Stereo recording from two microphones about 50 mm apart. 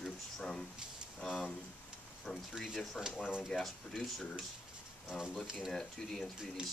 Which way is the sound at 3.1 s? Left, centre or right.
Left.